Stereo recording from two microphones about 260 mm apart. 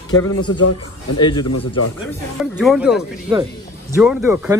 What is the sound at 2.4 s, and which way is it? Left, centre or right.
Speech, centre.